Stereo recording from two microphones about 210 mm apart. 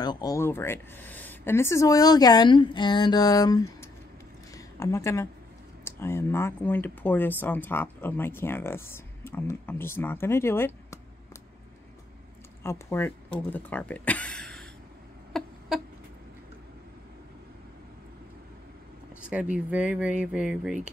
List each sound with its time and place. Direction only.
0.0 s speech: 20° left (ahead or behind)
12.6 s speech: 10° left (ahead or behind)
15.3 s a sound: centre (ahead or behind)
19.2 s speech: 5° right (ahead or behind)